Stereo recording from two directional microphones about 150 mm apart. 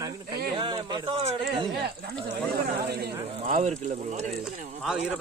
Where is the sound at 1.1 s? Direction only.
40° right (ahead or behind).